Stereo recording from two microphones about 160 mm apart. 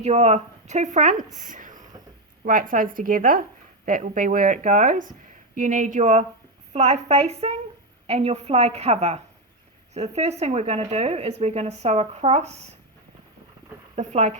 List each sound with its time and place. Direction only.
0.0 s speech: 40° right (ahead or behind)
13.9 s speech: 45° right (ahead or behind)